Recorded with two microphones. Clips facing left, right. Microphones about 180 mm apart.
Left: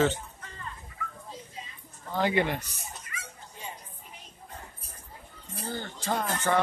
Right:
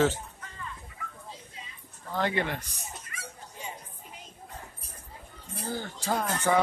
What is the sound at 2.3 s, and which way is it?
Speech, 15° left (ahead or behind).